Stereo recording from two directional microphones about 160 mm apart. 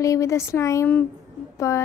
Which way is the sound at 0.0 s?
20° left (ahead or behind).